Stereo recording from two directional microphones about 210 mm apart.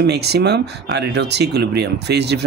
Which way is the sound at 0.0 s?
50° right (ahead or behind).